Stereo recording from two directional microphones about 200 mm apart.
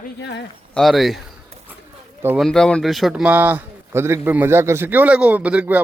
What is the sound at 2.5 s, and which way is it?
Speech, 5° left (ahead or behind).